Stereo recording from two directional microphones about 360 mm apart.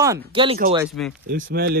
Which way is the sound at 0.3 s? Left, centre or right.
Centre.